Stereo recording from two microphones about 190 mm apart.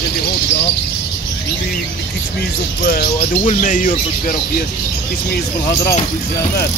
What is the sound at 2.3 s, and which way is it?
Speech, 55° left (ahead or behind).